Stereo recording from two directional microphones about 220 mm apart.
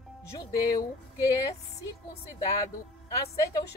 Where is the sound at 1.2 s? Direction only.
15° left (ahead or behind).